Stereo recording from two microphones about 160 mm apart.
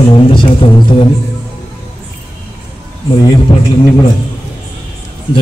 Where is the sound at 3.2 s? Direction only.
25° left (ahead or behind).